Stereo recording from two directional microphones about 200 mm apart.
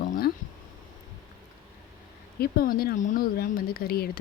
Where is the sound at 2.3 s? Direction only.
45° left (ahead or behind).